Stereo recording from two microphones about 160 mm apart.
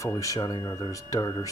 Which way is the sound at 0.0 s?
20° left (ahead or behind).